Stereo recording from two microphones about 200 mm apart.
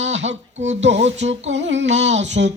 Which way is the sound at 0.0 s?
65° right (ahead or behind).